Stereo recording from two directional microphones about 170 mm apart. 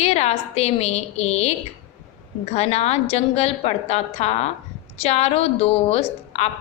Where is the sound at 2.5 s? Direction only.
40° left (ahead or behind).